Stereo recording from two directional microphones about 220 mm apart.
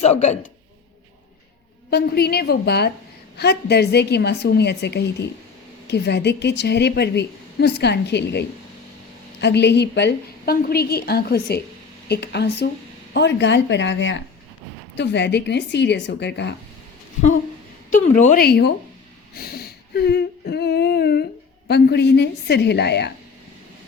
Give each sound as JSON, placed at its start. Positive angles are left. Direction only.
{"t": 0.0, "sound": "speech", "side_deg": 30}
{"t": 1.9, "sound": "a woman's voice", "side_deg": 45}
{"t": 17.9, "sound": "a woman's voice", "side_deg": 35}
{"t": 19.4, "sound": "humming", "side_deg": 45}
{"t": 21.7, "sound": "a woman's voice", "side_deg": 50}